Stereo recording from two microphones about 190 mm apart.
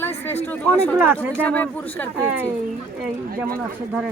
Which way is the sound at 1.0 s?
10° right (ahead or behind).